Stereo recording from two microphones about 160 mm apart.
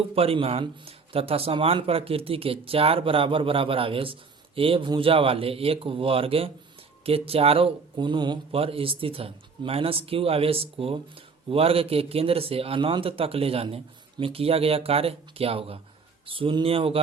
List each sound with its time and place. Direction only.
0.1 s speech: 35° right (ahead or behind)